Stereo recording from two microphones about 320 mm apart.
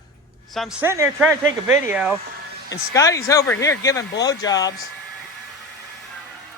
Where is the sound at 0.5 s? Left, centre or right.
Centre.